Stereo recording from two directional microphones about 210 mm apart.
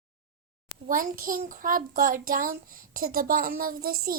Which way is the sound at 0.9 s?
40° right (ahead or behind).